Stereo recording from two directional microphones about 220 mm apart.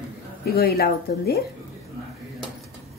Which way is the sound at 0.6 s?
45° left (ahead or behind).